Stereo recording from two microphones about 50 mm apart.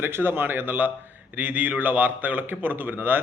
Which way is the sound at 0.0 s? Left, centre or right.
Right.